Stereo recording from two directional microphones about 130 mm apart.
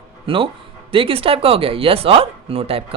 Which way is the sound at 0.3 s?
45° right (ahead or behind).